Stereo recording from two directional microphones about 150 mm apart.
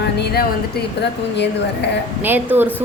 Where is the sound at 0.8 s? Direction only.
90° left.